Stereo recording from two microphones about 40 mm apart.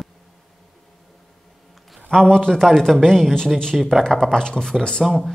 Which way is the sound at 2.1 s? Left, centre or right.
Centre.